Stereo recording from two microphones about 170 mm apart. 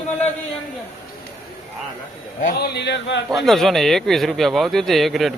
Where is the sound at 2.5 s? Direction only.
70° left (ahead or behind); by 3.2 s 90° left.